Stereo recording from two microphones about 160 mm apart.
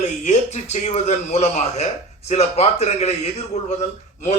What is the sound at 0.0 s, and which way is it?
A man's voice, 45° left (ahead or behind).